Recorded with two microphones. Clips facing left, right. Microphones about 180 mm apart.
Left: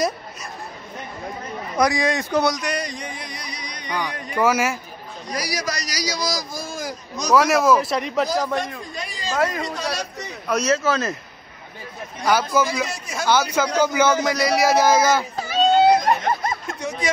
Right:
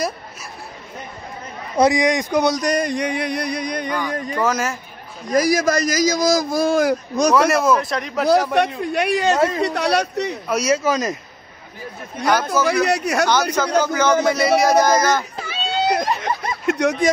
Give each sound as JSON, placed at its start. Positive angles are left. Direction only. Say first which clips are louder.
{"t": 1.8, "sound": "speech", "louder": "right 4 dB", "side_deg": -20}
{"t": 2.5, "sound": "speech", "louder": "right 7 dB", "side_deg": -40}
{"t": 2.9, "sound": "a sound", "louder": "right 12 dB", "side_deg": -70}
{"t": 4.4, "sound": "a man's voice", "louder": "left 2 dB", "side_deg": 10}
{"t": 5.3, "sound": "a man's voice", "louder": "right 11 dB", "side_deg": -50}
{"t": 7.5, "sound": "speech", "louder": "even", "side_deg": 0}
{"t": 8.5, "sound": "speech", "louder": "right 9 dB", "side_deg": -70}
{"t": 10.5, "sound": "speech", "louder": "right 1 dB", "side_deg": -10}
{"t": 12.3, "sound": "a man's voice", "louder": "right 1 dB", "side_deg": 5}
{"t": 12.6, "sound": "speech", "louder": "right 9 dB", "side_deg": -70}
{"t": 13.7, "sound": "a man's voice", "louder": "right 1 dB", "side_deg": 10}
{"t": 14.2, "sound": "speech", "louder": "right 3 dB", "side_deg": 0}
{"t": 15.4, "sound": "a sound", "louder": "left 6 dB", "side_deg": 45}
{"t": 16.6, "sound": "a sound", "louder": "right 11 dB", "side_deg": -75}